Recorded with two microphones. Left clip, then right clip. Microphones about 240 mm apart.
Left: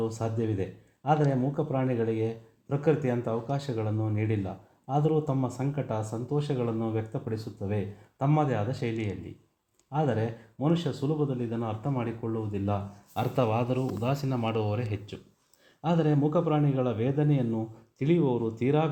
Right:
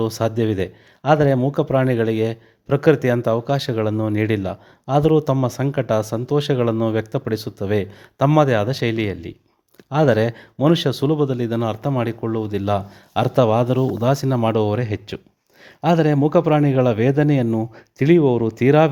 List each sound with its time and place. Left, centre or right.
0.0 s a man's voice: right